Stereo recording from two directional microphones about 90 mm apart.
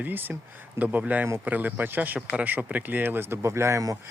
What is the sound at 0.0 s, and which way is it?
Speech, 20° right (ahead or behind).